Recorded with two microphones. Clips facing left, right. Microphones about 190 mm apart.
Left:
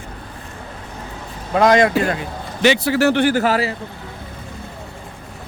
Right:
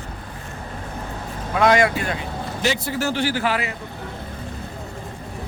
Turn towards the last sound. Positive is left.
turn(degrees=35)  # may be behind; listen again after turning